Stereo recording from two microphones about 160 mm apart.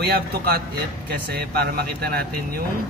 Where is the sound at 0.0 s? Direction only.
80° right.